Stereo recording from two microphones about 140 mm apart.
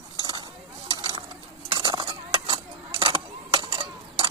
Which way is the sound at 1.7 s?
35° right (ahead or behind).